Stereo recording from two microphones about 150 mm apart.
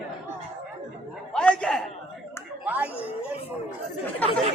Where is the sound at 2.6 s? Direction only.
10° right (ahead or behind).